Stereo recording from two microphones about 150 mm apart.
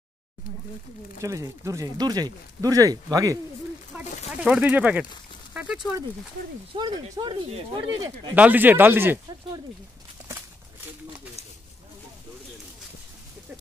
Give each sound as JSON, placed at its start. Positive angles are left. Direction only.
{"t": 1.2, "sound": "speech", "side_deg": -20}
{"t": 3.9, "sound": "speech", "side_deg": -10}
{"t": 6.7, "sound": "speech", "side_deg": -30}
{"t": 8.4, "sound": "speech", "side_deg": -10}